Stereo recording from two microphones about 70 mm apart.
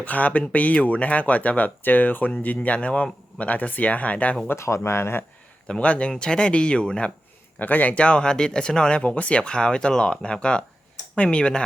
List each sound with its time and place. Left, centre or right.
0.0 s speech: left
4.4 s speech: left
5.6 s speech: centre